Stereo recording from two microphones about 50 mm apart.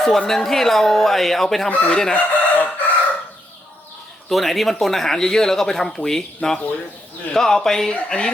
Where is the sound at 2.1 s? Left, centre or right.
Left.